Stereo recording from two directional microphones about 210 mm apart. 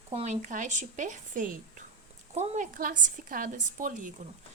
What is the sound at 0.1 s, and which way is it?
A woman's voice, 35° right (ahead or behind).